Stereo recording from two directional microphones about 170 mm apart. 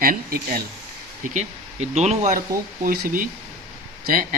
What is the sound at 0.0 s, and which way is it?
Speech, 60° right (ahead or behind).